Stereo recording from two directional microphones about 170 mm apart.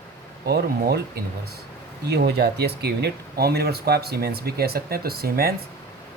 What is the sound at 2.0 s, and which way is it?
Speech, 75° right (ahead or behind).